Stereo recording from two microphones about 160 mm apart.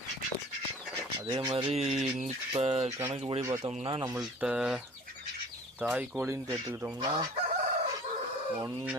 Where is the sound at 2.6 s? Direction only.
40° right (ahead or behind).